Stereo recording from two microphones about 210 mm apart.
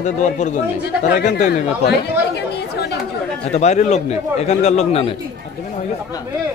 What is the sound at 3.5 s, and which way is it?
Speech, 35° left (ahead or behind).